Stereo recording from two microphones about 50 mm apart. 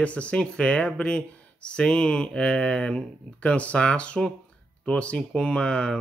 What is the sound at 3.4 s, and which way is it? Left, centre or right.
Speech, left.